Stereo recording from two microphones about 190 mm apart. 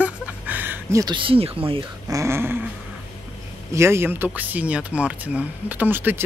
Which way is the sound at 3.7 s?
15° right (ahead or behind).